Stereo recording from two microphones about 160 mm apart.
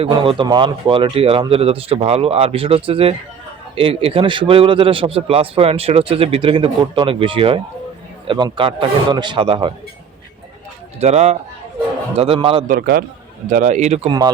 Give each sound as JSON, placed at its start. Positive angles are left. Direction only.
{"t": 0.0, "sound": "a man's voice", "side_deg": -35}
{"t": 11.0, "sound": "a man's voice", "side_deg": -45}
{"t": 12.6, "sound": "a man's voice", "side_deg": -70}
{"t": 13.5, "sound": "a man's voice", "side_deg": -50}
{"t": 14.1, "sound": "a man's voice", "side_deg": -25}